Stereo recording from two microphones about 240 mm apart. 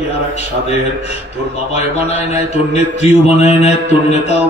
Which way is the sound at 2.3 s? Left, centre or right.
Left.